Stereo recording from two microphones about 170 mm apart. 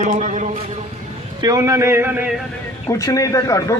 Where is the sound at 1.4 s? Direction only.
20° right (ahead or behind).